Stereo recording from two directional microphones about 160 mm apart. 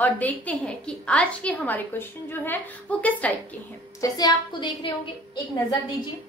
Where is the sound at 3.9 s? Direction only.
25° left (ahead or behind).